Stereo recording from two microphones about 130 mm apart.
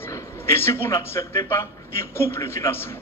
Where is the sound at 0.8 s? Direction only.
20° left (ahead or behind).